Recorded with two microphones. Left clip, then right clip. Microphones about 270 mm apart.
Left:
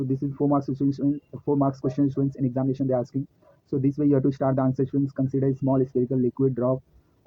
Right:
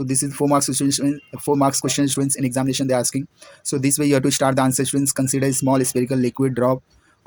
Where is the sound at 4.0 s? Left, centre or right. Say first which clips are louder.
Right 5 dB; right.